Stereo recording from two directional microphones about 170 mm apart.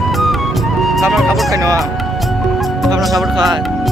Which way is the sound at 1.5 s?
20° right (ahead or behind).